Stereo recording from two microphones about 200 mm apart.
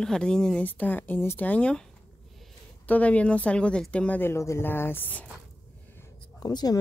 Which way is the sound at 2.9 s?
5° left (ahead or behind).